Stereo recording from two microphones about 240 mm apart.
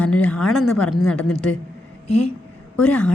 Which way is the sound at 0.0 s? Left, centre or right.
Centre.